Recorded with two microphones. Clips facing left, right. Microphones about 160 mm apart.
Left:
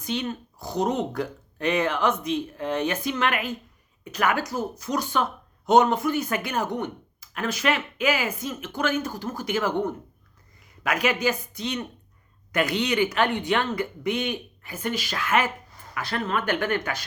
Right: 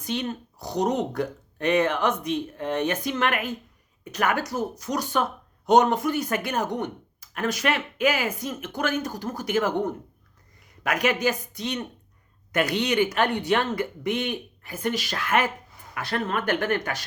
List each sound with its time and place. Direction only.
0.0 s speech: 45° right (ahead or behind)